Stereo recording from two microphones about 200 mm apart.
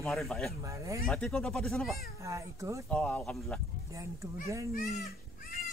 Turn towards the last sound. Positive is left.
turn(degrees=45)  # may be behind; listen again after turning